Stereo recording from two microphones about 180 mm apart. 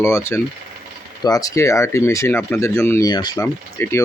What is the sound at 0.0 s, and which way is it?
Speech, 15° left (ahead or behind).